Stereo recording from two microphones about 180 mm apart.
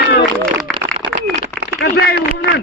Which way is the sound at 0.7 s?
5° left (ahead or behind).